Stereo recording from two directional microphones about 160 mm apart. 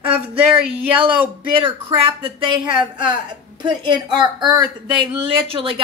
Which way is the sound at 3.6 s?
25° right (ahead or behind).